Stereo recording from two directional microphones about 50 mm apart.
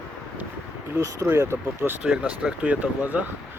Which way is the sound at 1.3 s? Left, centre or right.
Right.